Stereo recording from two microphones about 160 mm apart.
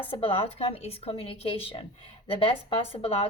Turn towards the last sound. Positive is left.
turn(degrees=35)  # may be behind; listen again after turning